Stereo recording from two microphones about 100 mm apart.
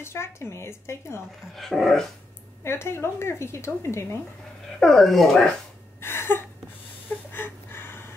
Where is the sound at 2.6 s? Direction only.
25° left (ahead or behind).